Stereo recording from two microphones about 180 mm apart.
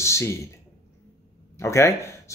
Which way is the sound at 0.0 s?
15° left (ahead or behind).